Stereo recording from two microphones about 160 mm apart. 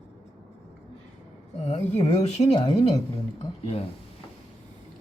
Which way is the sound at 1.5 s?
40° left (ahead or behind).